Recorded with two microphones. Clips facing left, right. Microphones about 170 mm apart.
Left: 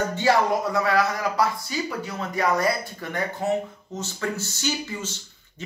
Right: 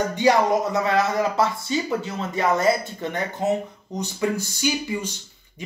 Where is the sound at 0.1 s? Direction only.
15° right (ahead or behind).